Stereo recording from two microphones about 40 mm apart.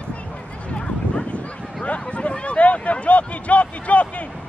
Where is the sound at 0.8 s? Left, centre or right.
Left.